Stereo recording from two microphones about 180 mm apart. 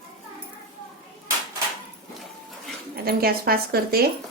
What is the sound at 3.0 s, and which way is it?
Speech, 55° right (ahead or behind).